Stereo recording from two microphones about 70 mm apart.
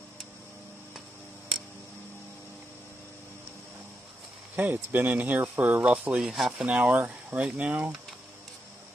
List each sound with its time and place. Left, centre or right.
4.6 s speech: right
6.1 s speech: centre
6.8 s speech: right